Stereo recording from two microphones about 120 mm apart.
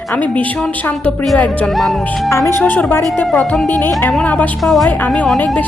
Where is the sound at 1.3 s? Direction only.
10° left (ahead or behind).